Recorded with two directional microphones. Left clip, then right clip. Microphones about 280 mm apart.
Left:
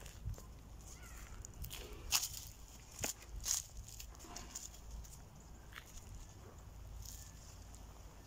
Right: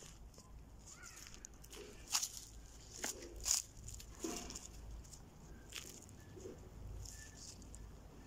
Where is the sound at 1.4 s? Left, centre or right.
Centre.